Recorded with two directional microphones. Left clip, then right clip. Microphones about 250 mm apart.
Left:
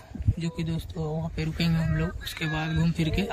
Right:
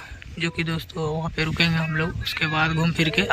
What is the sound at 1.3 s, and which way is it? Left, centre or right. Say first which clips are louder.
Speech: right 12 dB; centre.